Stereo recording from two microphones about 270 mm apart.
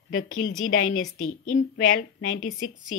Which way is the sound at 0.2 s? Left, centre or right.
Left.